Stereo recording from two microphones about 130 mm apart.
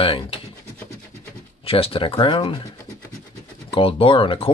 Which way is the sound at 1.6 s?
45° left (ahead or behind).